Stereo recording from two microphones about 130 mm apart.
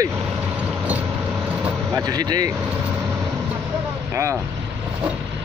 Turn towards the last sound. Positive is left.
turn(degrees=-20)  # may be behind; listen again after turning